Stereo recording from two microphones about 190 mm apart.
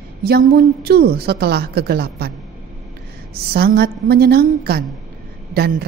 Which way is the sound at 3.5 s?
55° right (ahead or behind).